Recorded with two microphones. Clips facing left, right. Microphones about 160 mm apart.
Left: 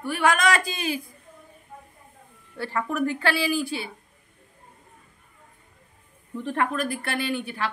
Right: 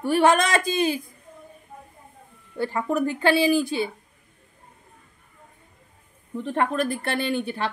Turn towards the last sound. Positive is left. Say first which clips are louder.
# right 2 dB
turn(degrees=-25)  # may be behind; listen again after turning